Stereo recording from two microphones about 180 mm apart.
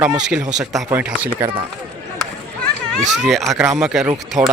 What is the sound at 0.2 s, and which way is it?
A man's voice, 5° right (ahead or behind).